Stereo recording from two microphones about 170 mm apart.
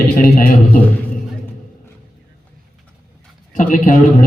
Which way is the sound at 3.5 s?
50° left (ahead or behind).